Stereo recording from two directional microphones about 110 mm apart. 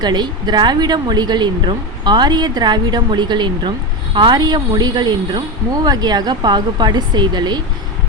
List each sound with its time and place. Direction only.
0.0 s speech: 40° right (ahead or behind)